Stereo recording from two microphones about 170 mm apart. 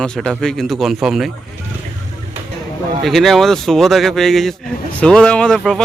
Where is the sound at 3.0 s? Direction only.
Centre (ahead or behind).